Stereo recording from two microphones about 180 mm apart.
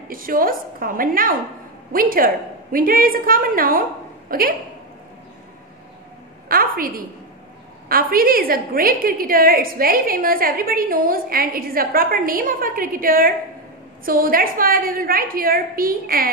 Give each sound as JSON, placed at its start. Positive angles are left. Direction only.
{"t": 0.1, "sound": "a woman's voice", "side_deg": -50}
{"t": 6.5, "sound": "a woman's voice", "side_deg": -50}